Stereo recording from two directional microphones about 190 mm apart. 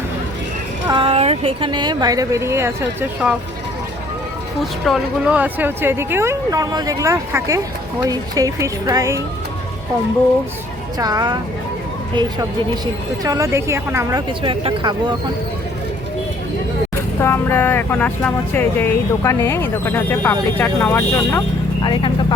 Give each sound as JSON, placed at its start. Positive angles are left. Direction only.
{"t": 0.9, "sound": "speech", "side_deg": -30}
{"t": 4.9, "sound": "speech", "side_deg": 0}
{"t": 10.9, "sound": "speech", "side_deg": -20}
{"t": 14.4, "sound": "speech", "side_deg": -25}
{"t": 17.2, "sound": "speech", "side_deg": 10}